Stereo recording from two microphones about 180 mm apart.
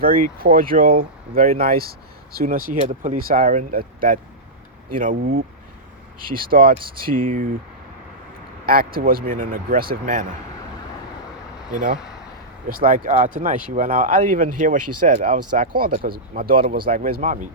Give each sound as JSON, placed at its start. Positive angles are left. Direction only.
{"t": 0.0, "sound": "speech", "side_deg": -55}
{"t": 8.6, "sound": "speech", "side_deg": -55}
{"t": 11.9, "sound": "a sound", "side_deg": -5}
{"t": 12.6, "sound": "speech", "side_deg": -50}